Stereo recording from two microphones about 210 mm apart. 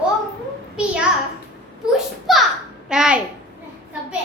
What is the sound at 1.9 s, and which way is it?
A child's voice, centre (ahead or behind).